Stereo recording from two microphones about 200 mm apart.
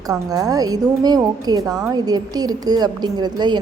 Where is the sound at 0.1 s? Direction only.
20° right (ahead or behind).